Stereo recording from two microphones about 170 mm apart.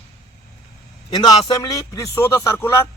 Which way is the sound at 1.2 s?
25° left (ahead or behind).